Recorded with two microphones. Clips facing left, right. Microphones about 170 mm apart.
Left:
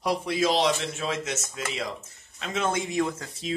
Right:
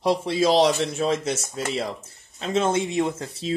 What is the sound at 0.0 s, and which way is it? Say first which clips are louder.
Speech: right 4 dB; 30° right (ahead or behind).